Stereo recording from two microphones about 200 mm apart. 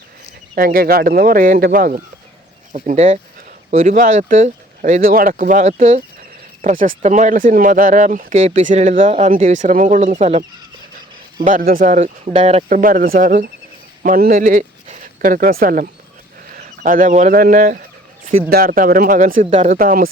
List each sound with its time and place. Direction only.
0.5 s speech: 45° right (ahead or behind)
2.7 s speech: 35° right (ahead or behind)
11.4 s speech: 45° right (ahead or behind)
19.7 s speech: 45° right (ahead or behind)